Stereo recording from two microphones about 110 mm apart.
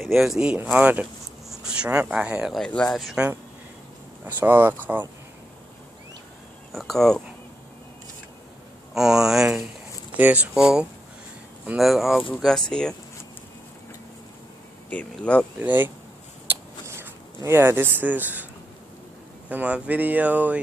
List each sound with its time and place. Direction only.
0.0 s speech: centre (ahead or behind)
1.6 s a sound: 10° right (ahead or behind)
1.9 s speech: 10° right (ahead or behind)
2.5 s speech: 10° left (ahead or behind)
4.3 s speech: 15° right (ahead or behind)
6.7 s speech: centre (ahead or behind)
8.9 s speech: 5° right (ahead or behind)
14.9 s speech: 10° left (ahead or behind)
15.6 s speech: 15° right (ahead or behind)
16.4 s a sound: 20° right (ahead or behind)
19.5 s speech: 15° right (ahead or behind)